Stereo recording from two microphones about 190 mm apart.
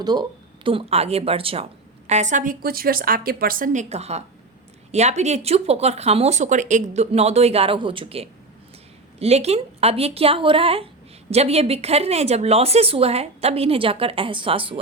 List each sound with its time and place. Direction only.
0.0 s a woman's voice: 20° right (ahead or behind)